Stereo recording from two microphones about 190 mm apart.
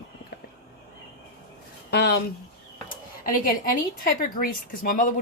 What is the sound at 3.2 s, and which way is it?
A woman's voice, 45° left (ahead or behind).